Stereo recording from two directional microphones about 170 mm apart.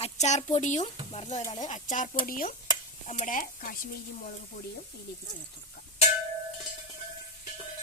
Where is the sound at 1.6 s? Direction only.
45° left (ahead or behind).